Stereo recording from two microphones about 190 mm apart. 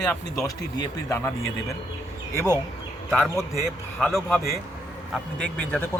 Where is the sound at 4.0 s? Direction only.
Centre (ahead or behind).